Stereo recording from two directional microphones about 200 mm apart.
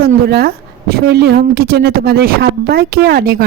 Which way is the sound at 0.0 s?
50° right (ahead or behind).